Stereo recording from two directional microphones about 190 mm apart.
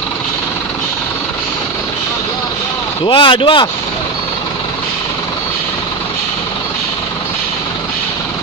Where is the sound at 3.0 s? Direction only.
25° left (ahead or behind).